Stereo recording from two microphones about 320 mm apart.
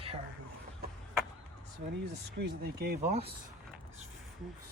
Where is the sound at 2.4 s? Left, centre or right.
Right.